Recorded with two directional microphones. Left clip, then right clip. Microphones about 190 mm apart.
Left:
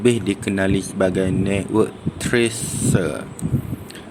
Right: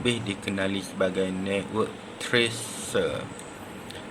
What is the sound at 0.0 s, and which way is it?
Speech, 35° left (ahead or behind).